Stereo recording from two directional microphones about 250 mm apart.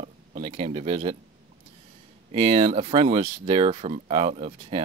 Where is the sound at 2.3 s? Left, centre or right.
Right.